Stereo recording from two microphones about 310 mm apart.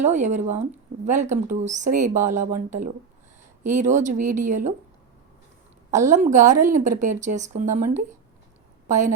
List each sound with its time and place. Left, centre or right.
0.0 s speech: right
3.7 s speech: right
5.9 s speech: right